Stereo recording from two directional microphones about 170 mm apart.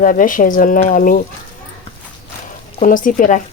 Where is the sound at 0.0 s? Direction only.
50° left (ahead or behind).